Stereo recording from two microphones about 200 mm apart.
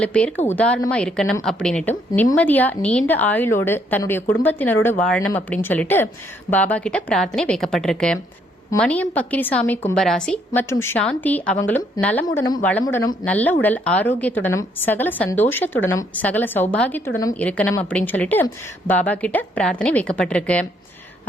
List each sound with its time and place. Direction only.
0.0 s a woman's voice: 5° left (ahead or behind)
13.2 s a woman's voice: 10° left (ahead or behind)